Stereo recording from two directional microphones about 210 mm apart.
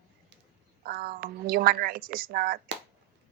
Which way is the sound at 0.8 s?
45° right (ahead or behind).